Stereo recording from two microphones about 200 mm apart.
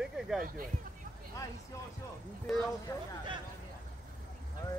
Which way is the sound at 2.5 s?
Centre (ahead or behind).